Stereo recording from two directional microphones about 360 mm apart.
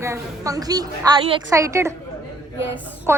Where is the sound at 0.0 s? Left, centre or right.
Centre.